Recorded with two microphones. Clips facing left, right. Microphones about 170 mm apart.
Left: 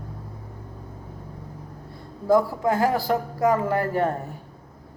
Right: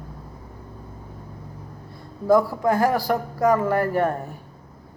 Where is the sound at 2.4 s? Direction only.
20° left (ahead or behind).